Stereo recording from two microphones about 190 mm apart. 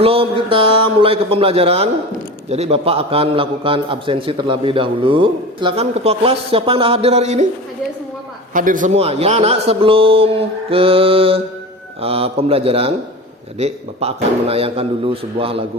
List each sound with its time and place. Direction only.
0.0 s a man's voice: 30° right (ahead or behind)
8.5 s a man's voice: 45° right (ahead or behind); by 15.6 s 30° right (ahead or behind)